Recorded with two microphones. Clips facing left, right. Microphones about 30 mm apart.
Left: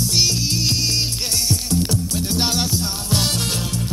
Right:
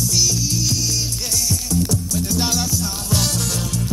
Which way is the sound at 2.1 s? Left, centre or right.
Left.